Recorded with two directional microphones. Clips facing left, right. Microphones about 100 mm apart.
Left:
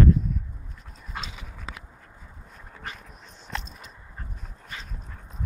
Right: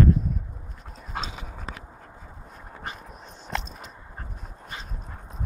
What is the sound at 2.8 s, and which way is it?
Dog, 30° right (ahead or behind).